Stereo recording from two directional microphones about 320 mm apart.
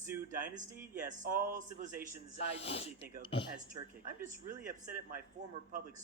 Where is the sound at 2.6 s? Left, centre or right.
Centre.